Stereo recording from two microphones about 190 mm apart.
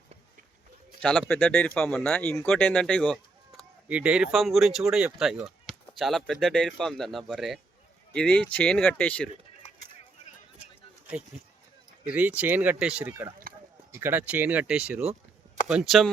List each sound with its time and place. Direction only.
1.3 s speech: 5° left (ahead or behind)
3.6 s speech: 5° right (ahead or behind)
9.6 s a sound: 30° left (ahead or behind)
12.1 s speech: 5° right (ahead or behind)